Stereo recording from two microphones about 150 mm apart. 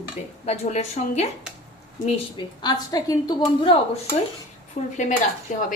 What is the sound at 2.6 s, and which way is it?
A woman's voice, 25° left (ahead or behind).